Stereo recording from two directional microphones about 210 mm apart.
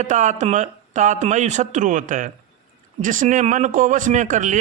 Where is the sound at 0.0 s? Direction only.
35° right (ahead or behind).